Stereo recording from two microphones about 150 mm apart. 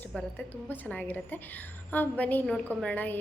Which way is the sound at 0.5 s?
10° left (ahead or behind).